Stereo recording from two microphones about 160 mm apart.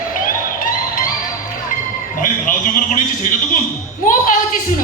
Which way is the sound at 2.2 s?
55° left (ahead or behind).